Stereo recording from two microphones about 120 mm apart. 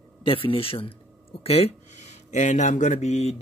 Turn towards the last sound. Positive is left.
turn(degrees=70)  # may be behind; listen again after turning